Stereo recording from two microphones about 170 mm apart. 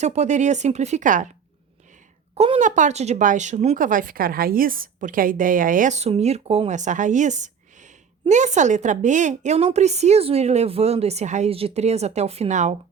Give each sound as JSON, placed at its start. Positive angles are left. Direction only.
{"t": 0.0, "sound": "speech", "side_deg": -40}
{"t": 2.3, "sound": "a woman's voice", "side_deg": -35}